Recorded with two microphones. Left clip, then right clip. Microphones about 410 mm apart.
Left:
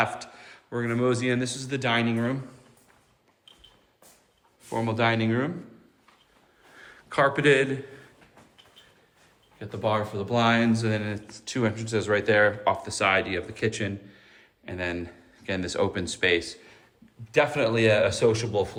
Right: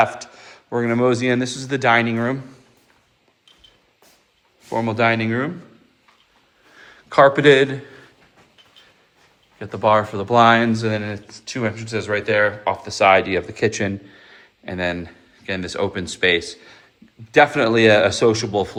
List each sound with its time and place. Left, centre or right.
0.1 s speech: centre
4.7 s speech: centre
6.7 s a man's voice: centre
9.6 s speech: centre
16.4 s speech: right